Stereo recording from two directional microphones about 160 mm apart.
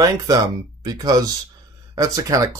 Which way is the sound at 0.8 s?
25° right (ahead or behind).